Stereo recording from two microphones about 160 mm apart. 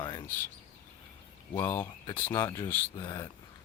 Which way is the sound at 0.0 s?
25° left (ahead or behind).